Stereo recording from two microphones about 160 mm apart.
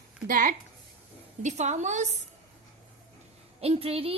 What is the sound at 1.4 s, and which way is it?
Speech, 45° right (ahead or behind).